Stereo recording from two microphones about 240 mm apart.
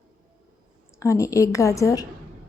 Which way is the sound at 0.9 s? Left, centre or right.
Centre.